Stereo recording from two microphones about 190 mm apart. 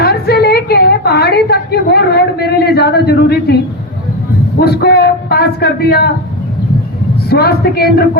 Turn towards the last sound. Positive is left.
turn(degrees=55)  # may be behind; listen again after turning